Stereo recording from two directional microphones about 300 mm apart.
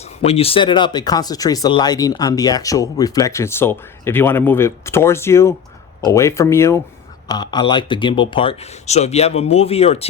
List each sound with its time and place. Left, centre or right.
0.2 s speech: centre